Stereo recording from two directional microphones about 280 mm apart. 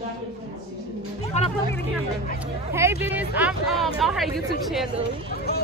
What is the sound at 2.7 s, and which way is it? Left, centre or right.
Speech, centre.